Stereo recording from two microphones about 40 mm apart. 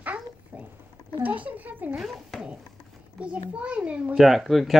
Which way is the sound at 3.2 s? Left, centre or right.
Right.